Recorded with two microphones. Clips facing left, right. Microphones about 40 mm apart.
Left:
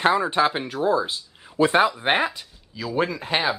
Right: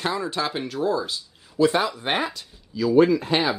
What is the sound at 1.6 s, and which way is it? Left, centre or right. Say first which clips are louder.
Speech: left 2 dB; left.